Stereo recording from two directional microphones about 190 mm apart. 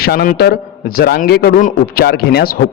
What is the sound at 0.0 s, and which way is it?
A man's voice, 50° left (ahead or behind).